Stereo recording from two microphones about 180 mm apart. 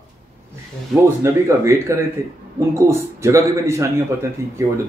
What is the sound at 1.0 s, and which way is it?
A man's voice, 15° right (ahead or behind).